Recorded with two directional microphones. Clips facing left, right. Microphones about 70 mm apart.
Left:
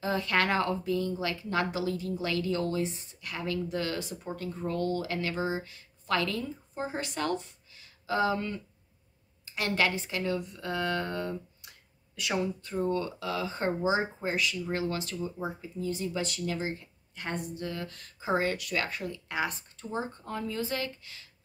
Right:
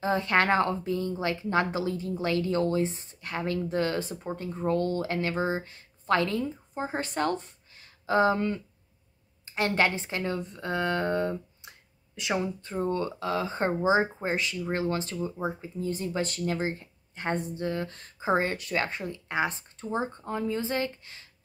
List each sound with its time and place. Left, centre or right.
0.0 s speech: right
6.9 s speech: right
9.6 s a woman's voice: right